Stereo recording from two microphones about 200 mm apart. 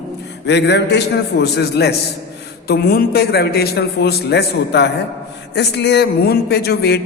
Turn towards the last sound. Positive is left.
turn(degrees=55)  # may be behind; listen again after turning